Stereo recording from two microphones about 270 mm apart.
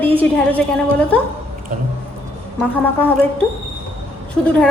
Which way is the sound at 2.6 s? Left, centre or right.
Centre.